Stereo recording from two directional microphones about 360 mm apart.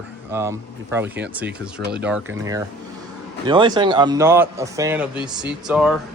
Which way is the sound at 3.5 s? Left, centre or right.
Centre.